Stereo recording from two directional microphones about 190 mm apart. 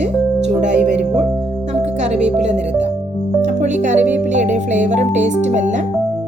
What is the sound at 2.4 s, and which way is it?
Speech, 35° right (ahead or behind).